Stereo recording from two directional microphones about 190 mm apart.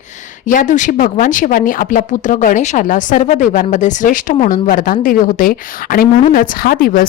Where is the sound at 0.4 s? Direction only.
45° left (ahead or behind).